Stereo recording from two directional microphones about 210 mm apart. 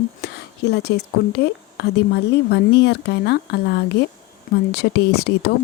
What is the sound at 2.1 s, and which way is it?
Speech, 55° left (ahead or behind).